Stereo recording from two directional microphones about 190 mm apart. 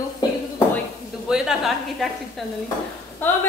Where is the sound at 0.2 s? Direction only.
20° left (ahead or behind).